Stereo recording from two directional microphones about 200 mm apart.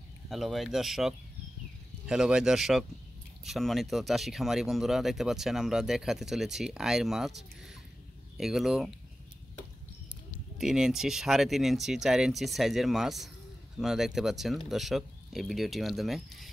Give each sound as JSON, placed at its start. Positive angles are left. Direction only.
{"t": 0.3, "sound": "speech", "side_deg": 0}
{"t": 10.6, "sound": "speech", "side_deg": 0}